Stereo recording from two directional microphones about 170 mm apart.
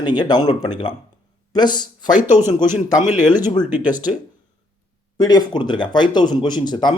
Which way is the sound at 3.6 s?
10° right (ahead or behind).